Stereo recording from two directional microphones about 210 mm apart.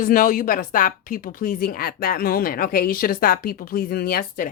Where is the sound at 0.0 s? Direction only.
40° left (ahead or behind).